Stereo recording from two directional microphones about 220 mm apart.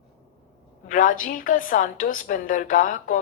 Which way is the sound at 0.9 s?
35° left (ahead or behind).